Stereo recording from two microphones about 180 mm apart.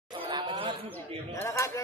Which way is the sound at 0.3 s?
25° right (ahead or behind).